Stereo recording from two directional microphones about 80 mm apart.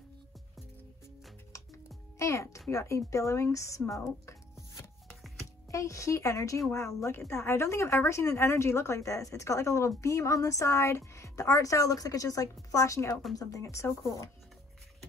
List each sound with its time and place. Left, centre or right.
1.5 s music: left
2.1 s a child's voice: left
5.7 s speech: left